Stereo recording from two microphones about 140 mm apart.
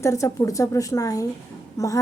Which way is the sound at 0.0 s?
20° left (ahead or behind).